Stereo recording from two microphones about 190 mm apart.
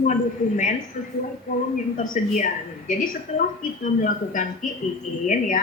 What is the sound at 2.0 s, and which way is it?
A woman's voice, 45° left (ahead or behind).